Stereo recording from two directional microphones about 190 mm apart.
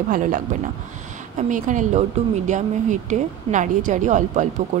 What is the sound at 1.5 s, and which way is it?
A woman's voice, 40° right (ahead or behind).